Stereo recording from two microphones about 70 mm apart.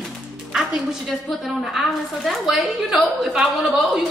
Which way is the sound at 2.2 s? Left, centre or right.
Centre.